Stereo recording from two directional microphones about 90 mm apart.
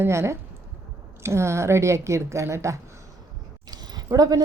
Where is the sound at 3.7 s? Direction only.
45° right (ahead or behind).